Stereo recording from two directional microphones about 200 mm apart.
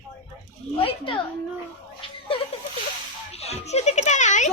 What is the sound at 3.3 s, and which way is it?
A child's voice, 30° left (ahead or behind).